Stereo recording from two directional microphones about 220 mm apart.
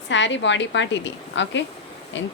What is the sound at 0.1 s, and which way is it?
Speech, 55° left (ahead or behind).